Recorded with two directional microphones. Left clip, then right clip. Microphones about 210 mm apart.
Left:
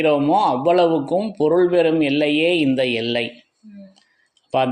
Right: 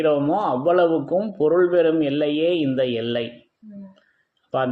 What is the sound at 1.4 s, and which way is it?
Speech, 45° left (ahead or behind).